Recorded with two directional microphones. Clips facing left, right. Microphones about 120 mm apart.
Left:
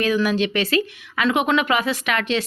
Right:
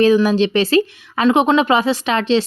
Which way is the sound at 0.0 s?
30° right (ahead or behind).